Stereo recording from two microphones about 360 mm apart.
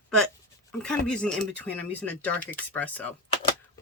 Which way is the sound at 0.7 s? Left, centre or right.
Centre.